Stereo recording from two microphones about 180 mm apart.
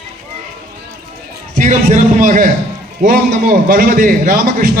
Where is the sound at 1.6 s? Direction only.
40° right (ahead or behind).